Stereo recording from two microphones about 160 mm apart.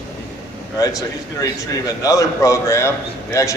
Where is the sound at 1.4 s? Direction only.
20° left (ahead or behind).